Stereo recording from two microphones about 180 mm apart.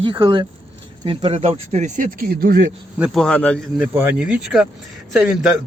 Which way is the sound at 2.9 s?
Centre (ahead or behind).